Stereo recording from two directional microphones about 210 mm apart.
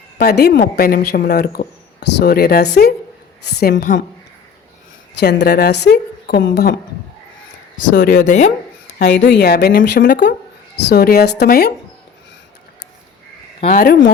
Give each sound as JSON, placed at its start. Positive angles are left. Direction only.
{"t": 0.2, "sound": "a woman's voice", "side_deg": 50}
{"t": 5.2, "sound": "a woman's voice", "side_deg": 50}
{"t": 7.9, "sound": "speech", "side_deg": 40}
{"t": 9.0, "sound": "a woman's voice", "side_deg": 55}
{"t": 13.7, "sound": "a woman's voice", "side_deg": 45}